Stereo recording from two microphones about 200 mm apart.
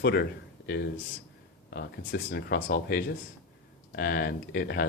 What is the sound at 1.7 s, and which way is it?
Speech, 55° left (ahead or behind).